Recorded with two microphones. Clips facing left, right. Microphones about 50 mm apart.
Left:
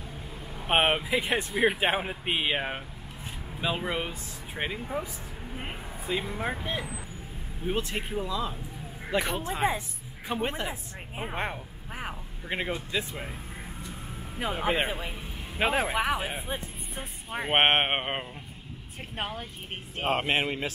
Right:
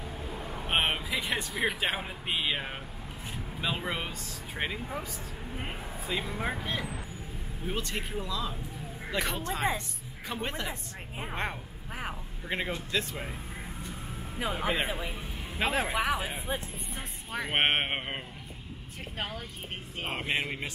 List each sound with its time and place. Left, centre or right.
0.7 s vehicle: left
1.6 s speech: left
3.6 s speech: centre
7.6 s a woman's voice: centre
14.6 s a man's voice: centre
15.6 s speech: centre
17.6 s speech: left
20.1 s speech: left